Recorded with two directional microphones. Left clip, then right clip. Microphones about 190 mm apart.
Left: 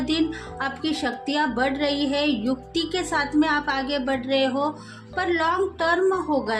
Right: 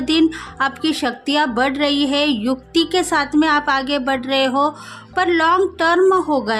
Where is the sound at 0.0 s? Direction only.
45° right (ahead or behind).